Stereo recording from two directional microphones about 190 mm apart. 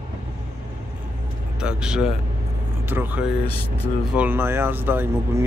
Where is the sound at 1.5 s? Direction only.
5° right (ahead or behind).